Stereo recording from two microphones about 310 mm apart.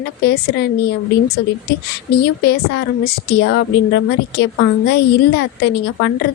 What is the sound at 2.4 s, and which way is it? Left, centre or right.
A woman's voice, left.